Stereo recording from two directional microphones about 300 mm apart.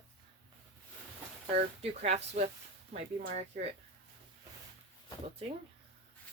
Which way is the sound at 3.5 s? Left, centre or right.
Right.